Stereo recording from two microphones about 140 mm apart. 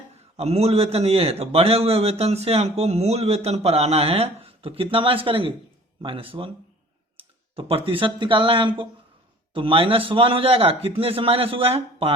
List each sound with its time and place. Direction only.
0.3 s a man's voice: 50° right (ahead or behind)